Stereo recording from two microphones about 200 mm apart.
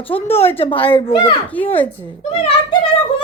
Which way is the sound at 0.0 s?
10° left (ahead or behind).